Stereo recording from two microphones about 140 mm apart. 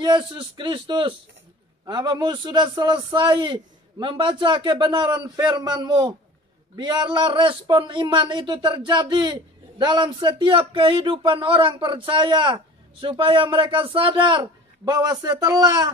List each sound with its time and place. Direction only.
0.0 s a man's voice: 35° right (ahead or behind)